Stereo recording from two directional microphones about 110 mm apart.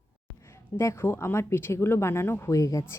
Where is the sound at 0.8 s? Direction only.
25° left (ahead or behind).